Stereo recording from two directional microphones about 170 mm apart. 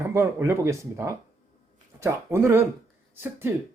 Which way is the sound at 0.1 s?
15° right (ahead or behind).